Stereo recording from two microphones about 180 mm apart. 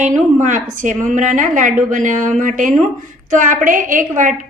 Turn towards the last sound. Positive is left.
turn(degrees=-45)  # may be behind; listen again after turning